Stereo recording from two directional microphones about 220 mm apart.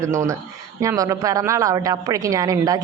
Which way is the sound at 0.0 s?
15° right (ahead or behind).